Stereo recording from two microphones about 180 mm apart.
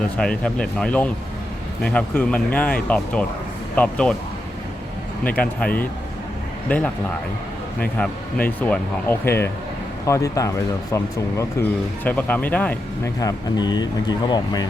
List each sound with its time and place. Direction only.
0.2 s speech: 5° left (ahead or behind)
5.2 s speech: 10° left (ahead or behind)
13.1 s speech: 20° left (ahead or behind)